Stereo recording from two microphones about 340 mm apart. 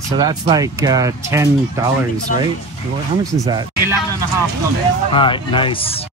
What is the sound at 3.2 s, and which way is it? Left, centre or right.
Speech, centre.